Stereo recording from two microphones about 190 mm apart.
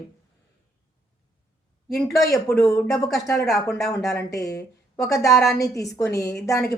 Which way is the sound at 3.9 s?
15° left (ahead or behind).